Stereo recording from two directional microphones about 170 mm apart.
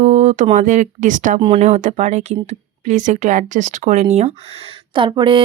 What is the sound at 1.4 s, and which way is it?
Speech, 35° right (ahead or behind).